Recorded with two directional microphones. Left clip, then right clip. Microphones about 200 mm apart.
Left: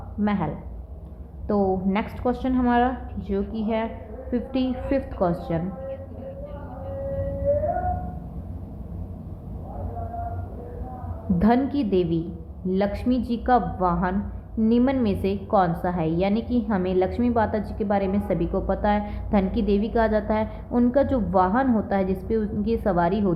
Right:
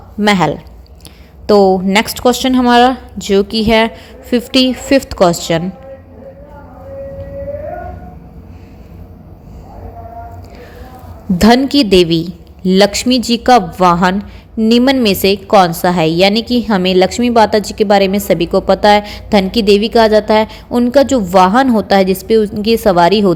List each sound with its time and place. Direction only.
0.2 s a woman's voice: 50° right (ahead or behind)
11.3 s a woman's voice: 40° right (ahead or behind)